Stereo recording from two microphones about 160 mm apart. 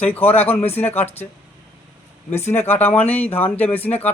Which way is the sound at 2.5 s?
15° left (ahead or behind).